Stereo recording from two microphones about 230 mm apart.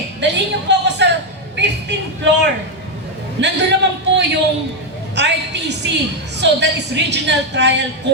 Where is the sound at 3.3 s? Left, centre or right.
Right.